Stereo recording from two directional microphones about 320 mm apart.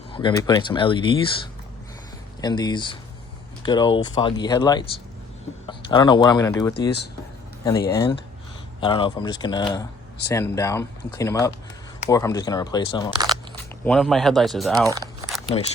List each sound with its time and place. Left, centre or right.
0.1 s speech: centre
2.4 s speech: centre
13.1 s crunch: centre
13.8 s speech: centre
14.8 s crumpling: centre
15.5 s speech: centre